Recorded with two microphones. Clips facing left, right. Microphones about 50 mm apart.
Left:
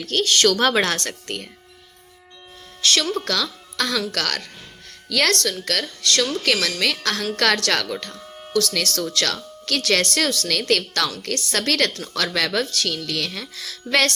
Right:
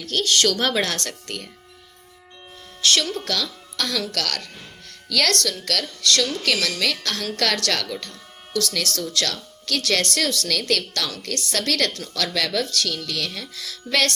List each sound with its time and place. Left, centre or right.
0.0 s speech: left
2.8 s speech: left
6.4 s speech: left